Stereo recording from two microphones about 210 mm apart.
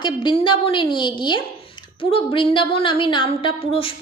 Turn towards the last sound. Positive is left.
turn(degrees=25)  # may be behind; listen again after turning